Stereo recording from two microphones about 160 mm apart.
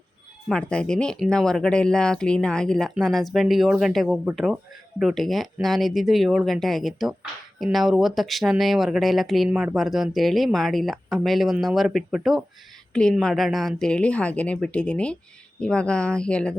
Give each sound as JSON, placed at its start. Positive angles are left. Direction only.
{"t": 0.4, "sound": "a woman's voice", "side_deg": 5}